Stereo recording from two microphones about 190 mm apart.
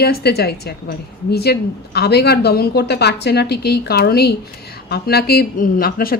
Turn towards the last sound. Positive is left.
turn(degrees=50)  # may be behind; listen again after turning